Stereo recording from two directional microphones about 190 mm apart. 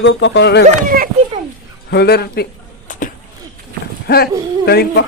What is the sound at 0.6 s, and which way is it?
Speech, 50° right (ahead or behind).